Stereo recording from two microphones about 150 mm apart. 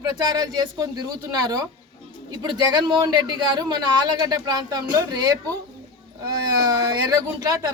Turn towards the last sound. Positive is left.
turn(degrees=-25)  # may be behind; listen again after turning